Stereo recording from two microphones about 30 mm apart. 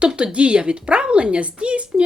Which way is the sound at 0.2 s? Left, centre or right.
Right.